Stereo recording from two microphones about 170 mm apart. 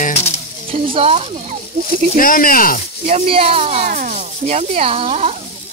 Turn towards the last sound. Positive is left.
turn(degrees=-40)  # may be behind; listen again after turning